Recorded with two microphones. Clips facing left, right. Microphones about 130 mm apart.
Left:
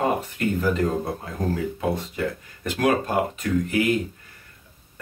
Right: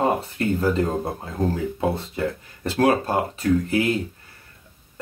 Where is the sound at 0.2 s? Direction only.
30° right (ahead or behind).